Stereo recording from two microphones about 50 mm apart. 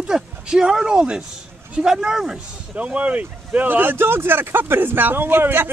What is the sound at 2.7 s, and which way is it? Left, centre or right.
Speech, right.